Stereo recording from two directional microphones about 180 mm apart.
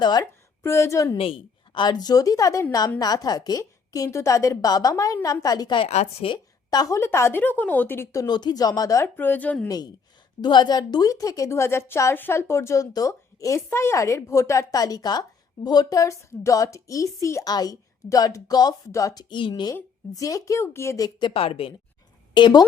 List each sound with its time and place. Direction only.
0.0 s speech: 20° left (ahead or behind)
1.1 s a woman's voice: 30° left (ahead or behind); by 9.6 s 10° left (ahead or behind)
9.6 s a woman's voice: 20° left (ahead or behind)